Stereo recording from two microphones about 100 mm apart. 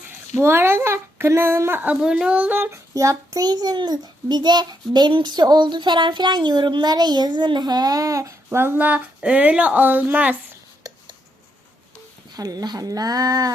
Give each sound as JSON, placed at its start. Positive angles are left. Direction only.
{"t": 0.4, "sound": "speech", "side_deg": -25}
{"t": 2.0, "sound": "speech", "side_deg": -10}
{"t": 2.9, "sound": "a child's voice", "side_deg": -35}
{"t": 8.5, "sound": "speech", "side_deg": -20}
{"t": 10.8, "sound": "a sound", "side_deg": -40}
{"t": 12.4, "sound": "speech", "side_deg": -40}